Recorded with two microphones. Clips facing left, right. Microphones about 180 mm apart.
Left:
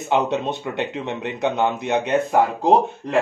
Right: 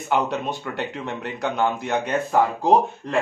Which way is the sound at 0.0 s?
25° left (ahead or behind).